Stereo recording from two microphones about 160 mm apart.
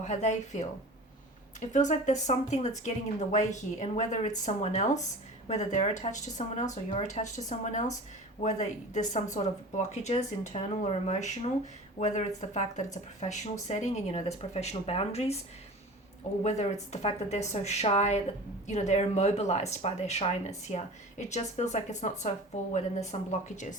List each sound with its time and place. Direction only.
0.0 s speech: 50° left (ahead or behind)
1.7 s speech: 50° left (ahead or behind)
16.4 s speech: 45° left (ahead or behind)